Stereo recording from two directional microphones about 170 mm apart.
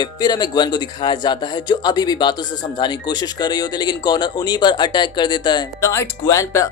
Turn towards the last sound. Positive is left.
turn(degrees=20)  # may be behind; listen again after turning